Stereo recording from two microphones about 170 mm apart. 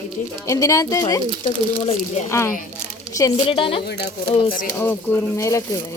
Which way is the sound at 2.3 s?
15° left (ahead or behind).